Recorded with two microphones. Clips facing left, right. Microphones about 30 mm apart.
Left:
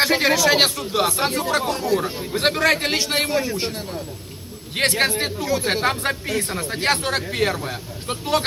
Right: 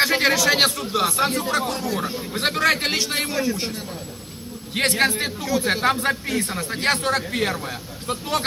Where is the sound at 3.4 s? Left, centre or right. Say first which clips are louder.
Left 1 dB; left.